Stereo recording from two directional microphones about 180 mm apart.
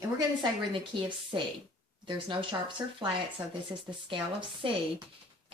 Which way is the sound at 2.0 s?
25° right (ahead or behind).